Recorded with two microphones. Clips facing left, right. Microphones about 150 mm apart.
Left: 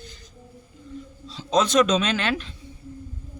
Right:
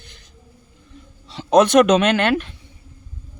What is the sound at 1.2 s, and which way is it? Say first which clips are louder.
Speech: right 8 dB; 65° right (ahead or behind).